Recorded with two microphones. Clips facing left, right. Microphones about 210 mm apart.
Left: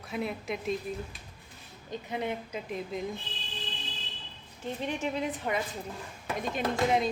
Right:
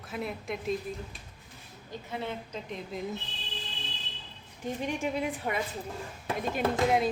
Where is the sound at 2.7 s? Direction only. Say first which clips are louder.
Left 3 dB; centre (ahead or behind).